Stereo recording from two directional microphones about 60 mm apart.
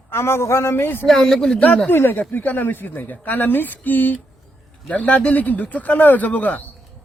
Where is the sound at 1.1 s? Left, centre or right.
Centre.